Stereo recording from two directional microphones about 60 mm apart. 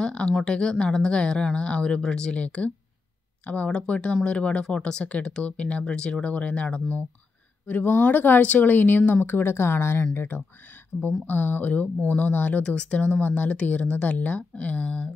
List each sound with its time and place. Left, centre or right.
0.0 s a sound: centre
0.5 s speech: centre
7.6 s speech: left
10.9 s speech: centre
11.2 s speech: left